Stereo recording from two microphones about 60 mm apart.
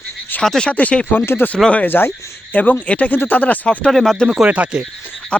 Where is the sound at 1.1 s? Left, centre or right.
Left.